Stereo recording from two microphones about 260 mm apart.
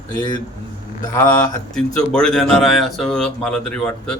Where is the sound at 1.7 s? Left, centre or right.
Centre.